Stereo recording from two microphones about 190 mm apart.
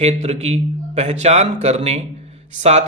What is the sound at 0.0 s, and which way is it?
A man's voice, 35° right (ahead or behind).